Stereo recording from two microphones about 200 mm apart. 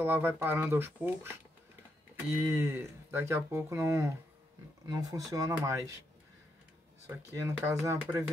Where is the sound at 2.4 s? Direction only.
10° right (ahead or behind).